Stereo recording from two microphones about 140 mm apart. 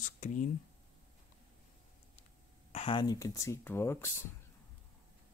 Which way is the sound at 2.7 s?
40° left (ahead or behind).